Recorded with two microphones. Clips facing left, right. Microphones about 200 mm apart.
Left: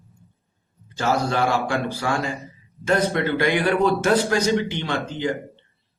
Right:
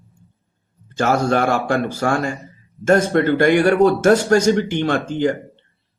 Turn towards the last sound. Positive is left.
turn(degrees=-50)  # may be behind; listen again after turning